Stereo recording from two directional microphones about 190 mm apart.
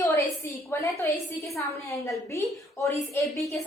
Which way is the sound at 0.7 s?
15° left (ahead or behind).